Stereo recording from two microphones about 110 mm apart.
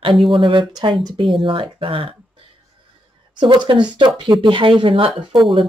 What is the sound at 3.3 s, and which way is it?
Speech, 45° right (ahead or behind).